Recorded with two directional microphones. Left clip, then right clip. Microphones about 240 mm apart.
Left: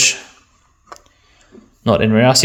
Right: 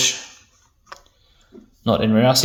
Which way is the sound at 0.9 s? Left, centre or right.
Left.